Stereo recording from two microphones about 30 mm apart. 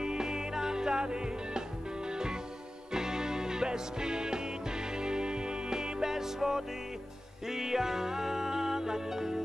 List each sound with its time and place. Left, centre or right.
0.0 s music: right